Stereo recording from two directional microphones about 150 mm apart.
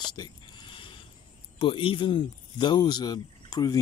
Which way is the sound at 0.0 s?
30° left (ahead or behind).